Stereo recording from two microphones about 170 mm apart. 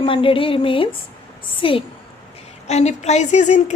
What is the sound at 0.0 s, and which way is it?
A woman's voice, 30° left (ahead or behind).